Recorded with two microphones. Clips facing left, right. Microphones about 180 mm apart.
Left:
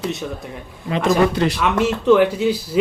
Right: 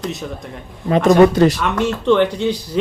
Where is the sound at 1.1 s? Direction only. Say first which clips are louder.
Right 6 dB; 45° right (ahead or behind).